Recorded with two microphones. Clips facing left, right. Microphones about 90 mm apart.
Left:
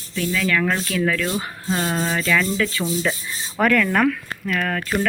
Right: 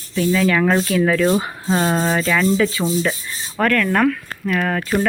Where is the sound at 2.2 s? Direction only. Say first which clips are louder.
Right 4 dB; 15° right (ahead or behind).